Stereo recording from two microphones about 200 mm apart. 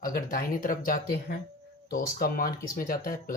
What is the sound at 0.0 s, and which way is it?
Speech, 45° left (ahead or behind).